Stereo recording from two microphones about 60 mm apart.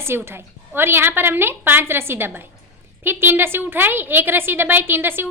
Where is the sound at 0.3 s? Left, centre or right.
Right.